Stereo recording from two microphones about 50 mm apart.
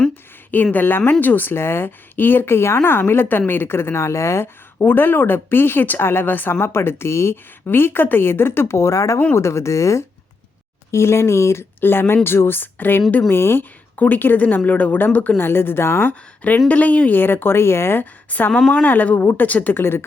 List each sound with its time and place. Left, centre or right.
0.5 s speech: left
4.8 s speech: left
7.7 s speech: left
8.7 s speech: left
9.3 s speech: left
10.9 s speech: left
11.8 s speech: left
13.2 s speech: left
13.9 s speech: left
15.4 s speech: left
16.0 s speech: left
17.2 s speech: left
18.0 s a woman's voice: left
19.7 s speech: left